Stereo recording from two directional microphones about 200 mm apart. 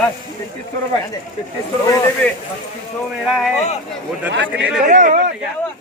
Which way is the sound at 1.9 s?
15° left (ahead or behind).